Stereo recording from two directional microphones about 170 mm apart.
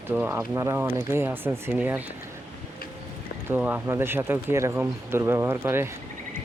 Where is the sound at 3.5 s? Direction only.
10° right (ahead or behind).